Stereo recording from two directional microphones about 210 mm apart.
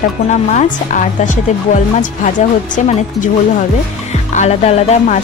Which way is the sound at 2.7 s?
35° left (ahead or behind).